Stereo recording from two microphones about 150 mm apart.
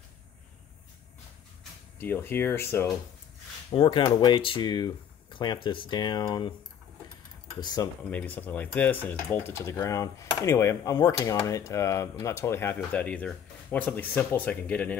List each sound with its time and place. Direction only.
2.0 s speech: 15° left (ahead or behind)
3.7 s speech: 30° left (ahead or behind)
7.6 s speech: 25° left (ahead or behind)
8.1 s speech: 10° left (ahead or behind)